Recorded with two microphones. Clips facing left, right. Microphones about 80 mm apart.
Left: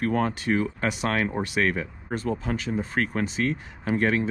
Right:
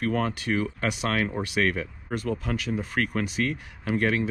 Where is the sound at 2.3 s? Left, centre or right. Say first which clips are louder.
Left 1 dB; left.